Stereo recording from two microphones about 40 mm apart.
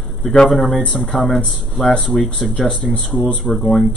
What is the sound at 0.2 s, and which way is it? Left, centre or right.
Speech, centre.